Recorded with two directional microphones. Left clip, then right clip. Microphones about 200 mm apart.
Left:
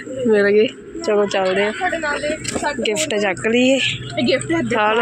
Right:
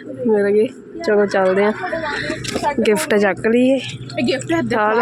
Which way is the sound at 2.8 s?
40° right (ahead or behind).